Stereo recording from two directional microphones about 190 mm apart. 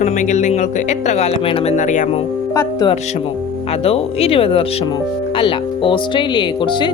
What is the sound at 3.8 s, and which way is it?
Speech, 30° left (ahead or behind).